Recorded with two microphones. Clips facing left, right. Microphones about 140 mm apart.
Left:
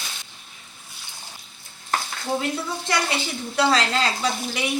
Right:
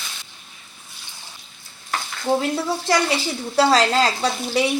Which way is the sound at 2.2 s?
30° right (ahead or behind).